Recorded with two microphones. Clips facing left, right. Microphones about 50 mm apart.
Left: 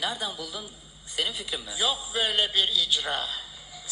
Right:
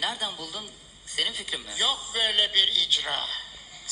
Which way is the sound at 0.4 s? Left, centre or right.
Right.